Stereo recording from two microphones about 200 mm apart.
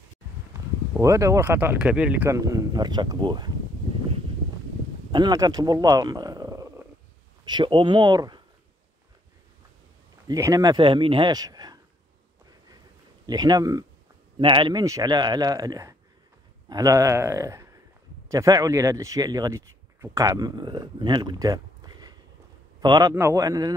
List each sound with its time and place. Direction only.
0.5 s speech: 15° right (ahead or behind)
5.1 s speech: 20° right (ahead or behind)
10.2 s speech: 15° right (ahead or behind)
13.3 s speech: 20° right (ahead or behind)